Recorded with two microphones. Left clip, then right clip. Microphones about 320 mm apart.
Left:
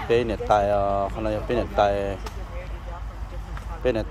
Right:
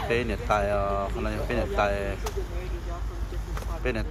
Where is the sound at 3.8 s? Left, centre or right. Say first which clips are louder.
Left 7 dB; left.